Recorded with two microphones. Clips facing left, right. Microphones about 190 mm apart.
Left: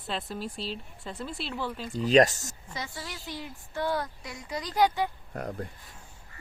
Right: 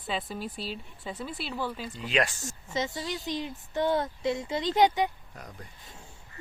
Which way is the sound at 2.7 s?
20° right (ahead or behind).